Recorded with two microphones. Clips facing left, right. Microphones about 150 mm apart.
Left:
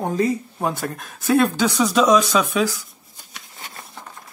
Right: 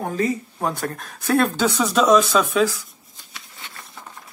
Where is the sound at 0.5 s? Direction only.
5° left (ahead or behind).